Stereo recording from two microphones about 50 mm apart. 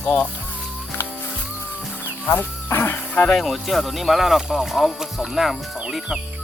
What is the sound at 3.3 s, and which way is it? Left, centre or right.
Speech, centre.